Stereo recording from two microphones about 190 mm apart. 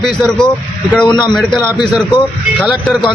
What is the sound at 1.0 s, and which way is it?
Speech, 25° left (ahead or behind).